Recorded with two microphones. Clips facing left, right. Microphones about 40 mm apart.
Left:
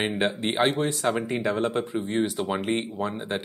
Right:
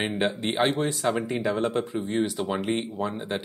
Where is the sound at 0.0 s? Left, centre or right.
Centre.